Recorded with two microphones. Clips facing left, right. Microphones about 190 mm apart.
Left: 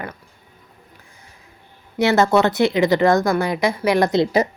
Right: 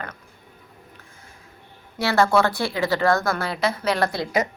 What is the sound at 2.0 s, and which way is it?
A woman's voice, 20° left (ahead or behind).